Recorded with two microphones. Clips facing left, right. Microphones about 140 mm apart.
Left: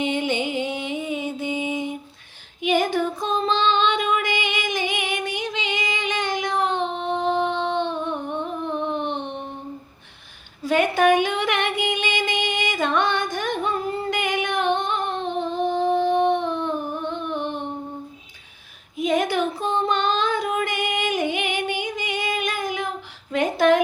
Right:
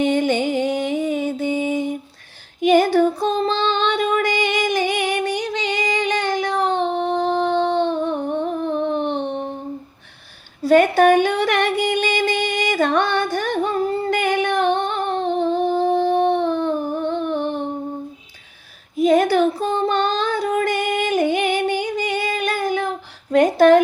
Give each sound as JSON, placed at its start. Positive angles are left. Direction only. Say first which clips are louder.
{"t": 0.0, "sound": "music", "louder": "right 6 dB", "side_deg": -40}
{"t": 2.6, "sound": "female singing", "louder": "right 7 dB", "side_deg": -40}
{"t": 10.6, "sound": "a sound", "louder": "right 6 dB", "side_deg": -40}
{"t": 14.1, "sound": "female singing", "louder": "right 4 dB", "side_deg": -35}
{"t": 18.9, "sound": "female singing", "louder": "right 6 dB", "side_deg": -35}
{"t": 23.3, "sound": "a sound", "louder": "right 6 dB", "side_deg": -40}